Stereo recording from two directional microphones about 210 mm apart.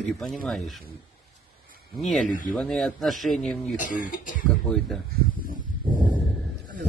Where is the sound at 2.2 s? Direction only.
40° left (ahead or behind).